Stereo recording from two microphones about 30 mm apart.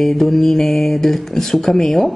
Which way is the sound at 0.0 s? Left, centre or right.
Centre.